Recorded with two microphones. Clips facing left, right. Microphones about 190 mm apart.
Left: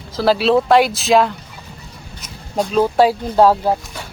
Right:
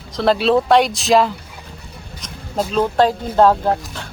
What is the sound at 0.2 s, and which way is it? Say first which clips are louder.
Speech: left 1 dB; centre (ahead or behind).